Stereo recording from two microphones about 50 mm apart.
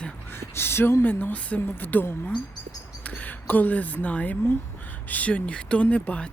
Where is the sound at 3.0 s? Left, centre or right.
Left.